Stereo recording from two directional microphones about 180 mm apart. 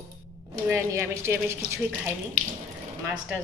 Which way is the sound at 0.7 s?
15° right (ahead or behind).